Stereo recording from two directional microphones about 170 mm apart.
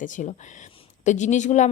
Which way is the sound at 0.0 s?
45° left (ahead or behind).